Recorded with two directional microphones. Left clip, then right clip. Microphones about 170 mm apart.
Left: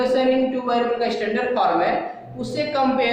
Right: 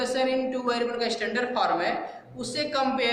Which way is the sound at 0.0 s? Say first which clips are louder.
Left 7 dB; 5° right (ahead or behind).